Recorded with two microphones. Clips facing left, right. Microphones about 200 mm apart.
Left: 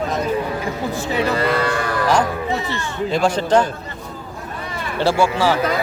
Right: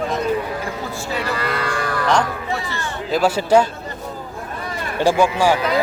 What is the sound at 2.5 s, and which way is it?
Speech, 20° left (ahead or behind).